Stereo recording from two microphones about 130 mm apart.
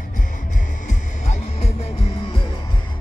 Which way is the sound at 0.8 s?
60° left (ahead or behind).